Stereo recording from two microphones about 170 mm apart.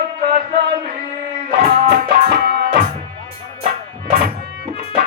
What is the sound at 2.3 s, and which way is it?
Music, 70° right (ahead or behind).